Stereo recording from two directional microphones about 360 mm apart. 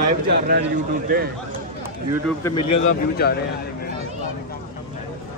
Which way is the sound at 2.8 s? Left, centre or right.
Left.